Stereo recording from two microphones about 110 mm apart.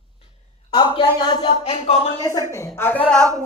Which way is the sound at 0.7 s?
45° left (ahead or behind).